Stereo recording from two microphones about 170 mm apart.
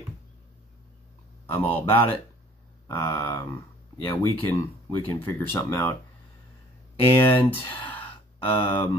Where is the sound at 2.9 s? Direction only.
15° left (ahead or behind).